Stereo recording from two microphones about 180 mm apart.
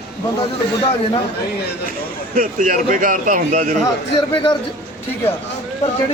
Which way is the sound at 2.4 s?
50° right (ahead or behind).